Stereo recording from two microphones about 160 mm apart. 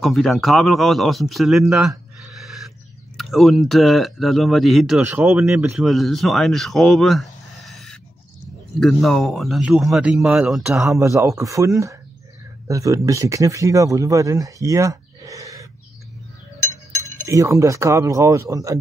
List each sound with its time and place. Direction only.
0.0 s speech: centre (ahead or behind)
1.7 s a sound: 5° right (ahead or behind)
3.2 s speech: centre (ahead or behind)
11.0 s speech: 20° right (ahead or behind)
17.3 s speech: 20° right (ahead or behind)